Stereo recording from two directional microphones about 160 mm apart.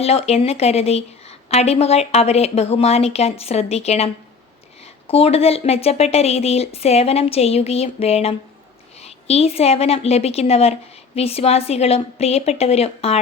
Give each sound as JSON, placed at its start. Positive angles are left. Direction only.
{"t": 0.0, "sound": "a woman's voice", "side_deg": 40}